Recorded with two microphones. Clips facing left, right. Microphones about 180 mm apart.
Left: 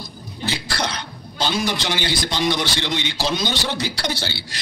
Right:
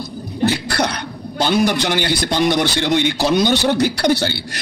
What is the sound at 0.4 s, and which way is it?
A man's voice, 60° right (ahead or behind).